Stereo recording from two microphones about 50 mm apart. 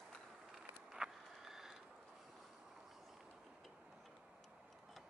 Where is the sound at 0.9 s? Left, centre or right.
Centre.